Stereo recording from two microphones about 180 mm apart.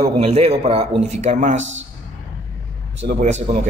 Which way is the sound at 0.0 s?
35° right (ahead or behind).